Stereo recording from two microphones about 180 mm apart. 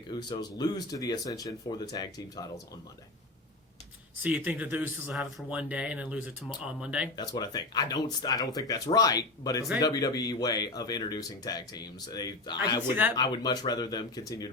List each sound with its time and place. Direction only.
0.1 s speech: 25° left (ahead or behind)
4.2 s speech: 10° right (ahead or behind)
7.2 s speech: 20° left (ahead or behind)
12.9 s speech: 10° right (ahead or behind)
13.3 s speech: 20° left (ahead or behind)